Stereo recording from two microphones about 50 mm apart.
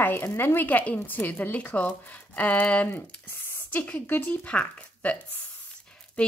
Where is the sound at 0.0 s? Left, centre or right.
Left.